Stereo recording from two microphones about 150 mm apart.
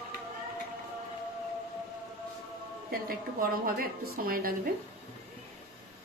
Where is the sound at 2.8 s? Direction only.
75° right (ahead or behind).